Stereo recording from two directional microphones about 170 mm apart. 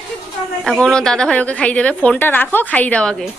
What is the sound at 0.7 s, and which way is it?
A woman's voice, 5° left (ahead or behind).